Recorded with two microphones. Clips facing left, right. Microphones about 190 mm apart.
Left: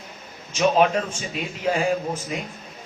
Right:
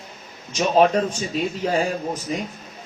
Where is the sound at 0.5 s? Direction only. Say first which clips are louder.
Right 2 dB; 35° right (ahead or behind).